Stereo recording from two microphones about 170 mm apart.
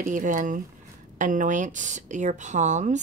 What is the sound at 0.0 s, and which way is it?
Speech, 50° right (ahead or behind).